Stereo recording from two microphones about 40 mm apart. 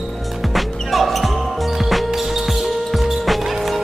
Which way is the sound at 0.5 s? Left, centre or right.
Centre.